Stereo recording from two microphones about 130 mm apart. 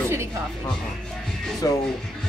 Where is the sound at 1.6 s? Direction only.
25° left (ahead or behind).